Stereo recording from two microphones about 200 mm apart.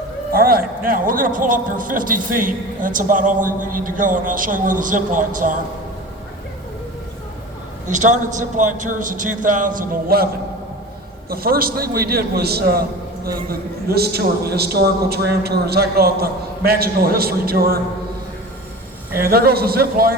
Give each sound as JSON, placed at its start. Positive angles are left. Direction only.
{"t": 0.3, "sound": "a man's voice", "side_deg": -45}
{"t": 7.9, "sound": "a man's voice", "side_deg": -40}
{"t": 11.3, "sound": "a man's voice", "side_deg": -50}
{"t": 19.2, "sound": "a man's voice", "side_deg": -50}